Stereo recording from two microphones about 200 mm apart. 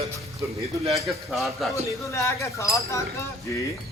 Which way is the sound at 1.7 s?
15° left (ahead or behind).